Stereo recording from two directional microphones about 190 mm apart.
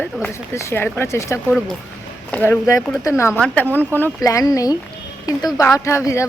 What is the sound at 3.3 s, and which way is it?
Speech, 5° left (ahead or behind).